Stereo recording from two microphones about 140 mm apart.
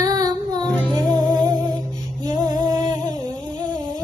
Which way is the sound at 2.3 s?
30° right (ahead or behind).